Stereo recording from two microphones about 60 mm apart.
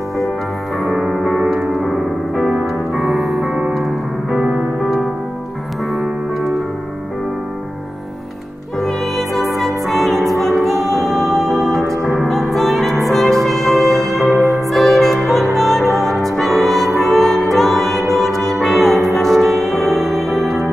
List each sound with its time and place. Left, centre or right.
0.7 s music: centre
4.4 s music: centre
8.7 s music: centre